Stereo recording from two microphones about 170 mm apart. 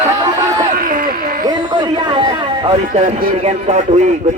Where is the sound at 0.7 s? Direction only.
55° right (ahead or behind).